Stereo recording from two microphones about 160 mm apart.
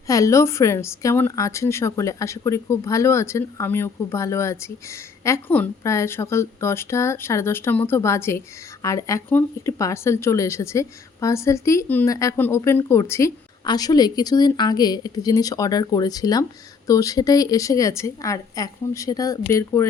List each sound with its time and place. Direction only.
0.1 s a woman's voice: 20° left (ahead or behind)